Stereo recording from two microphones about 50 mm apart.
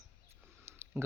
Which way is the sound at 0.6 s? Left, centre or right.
Right.